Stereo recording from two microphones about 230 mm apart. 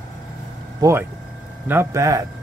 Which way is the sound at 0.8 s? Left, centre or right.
Centre.